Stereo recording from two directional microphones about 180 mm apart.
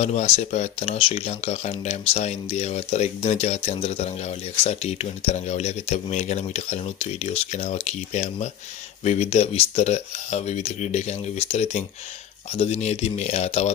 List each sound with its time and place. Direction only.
0.0 s speech: 40° left (ahead or behind)